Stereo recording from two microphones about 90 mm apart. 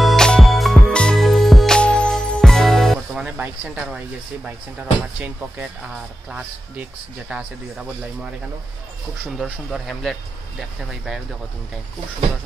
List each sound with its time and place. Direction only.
0.0 s music: 5° left (ahead or behind)
1.8 s music: 10° left (ahead or behind)
3.2 s speech: 15° right (ahead or behind)
9.4 s speech: centre (ahead or behind)